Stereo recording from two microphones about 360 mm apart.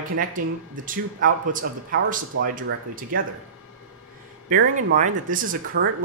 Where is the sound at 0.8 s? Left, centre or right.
Right.